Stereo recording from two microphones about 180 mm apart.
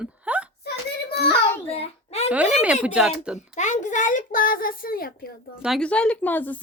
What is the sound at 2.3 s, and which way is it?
Speech, 5° right (ahead or behind).